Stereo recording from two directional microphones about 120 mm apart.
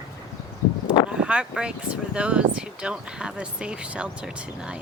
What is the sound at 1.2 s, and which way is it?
Speech, 10° right (ahead or behind).